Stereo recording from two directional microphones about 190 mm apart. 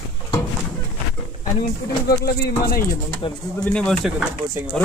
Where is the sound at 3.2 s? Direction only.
25° left (ahead or behind).